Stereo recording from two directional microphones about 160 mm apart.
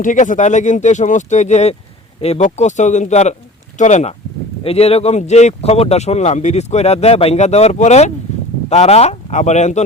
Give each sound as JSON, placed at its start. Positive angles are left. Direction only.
{"t": 0.0, "sound": "speech", "side_deg": 55}